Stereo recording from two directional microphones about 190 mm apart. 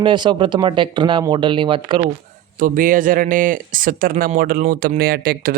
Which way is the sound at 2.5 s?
45° right (ahead or behind).